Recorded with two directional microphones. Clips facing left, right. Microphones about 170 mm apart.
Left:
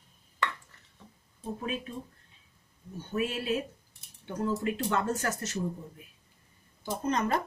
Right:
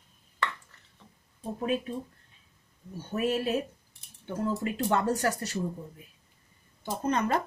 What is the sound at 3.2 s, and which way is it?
Speech, 40° right (ahead or behind).